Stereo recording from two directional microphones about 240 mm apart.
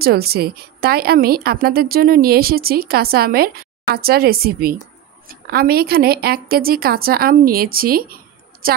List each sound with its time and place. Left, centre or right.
0.0 s a woman's voice: right